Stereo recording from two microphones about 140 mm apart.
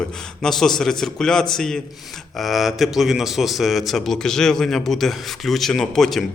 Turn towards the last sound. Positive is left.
turn(degrees=0)  # may be behind; listen again after turning